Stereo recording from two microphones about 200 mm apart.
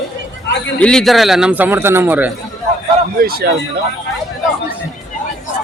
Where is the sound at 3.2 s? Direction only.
50° right (ahead or behind).